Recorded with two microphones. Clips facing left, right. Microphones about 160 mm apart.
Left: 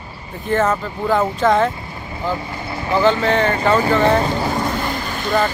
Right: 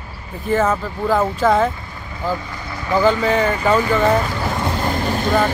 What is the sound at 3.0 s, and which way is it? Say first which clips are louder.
Speech: even; 10° right (ahead or behind).